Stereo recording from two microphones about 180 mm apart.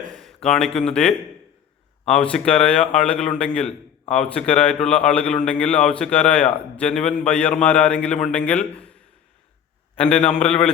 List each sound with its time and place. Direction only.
0.4 s a man's voice: 5° left (ahead or behind)
10.0 s a man's voice: 35° left (ahead or behind)